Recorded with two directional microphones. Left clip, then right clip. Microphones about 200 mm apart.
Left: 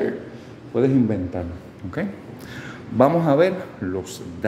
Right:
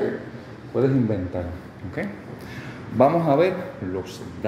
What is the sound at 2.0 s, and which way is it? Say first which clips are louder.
A man's voice: left 1 dB; 30° left (ahead or behind).